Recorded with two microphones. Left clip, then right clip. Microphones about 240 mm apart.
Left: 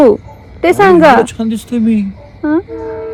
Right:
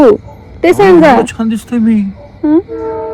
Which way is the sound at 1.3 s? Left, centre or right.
Right.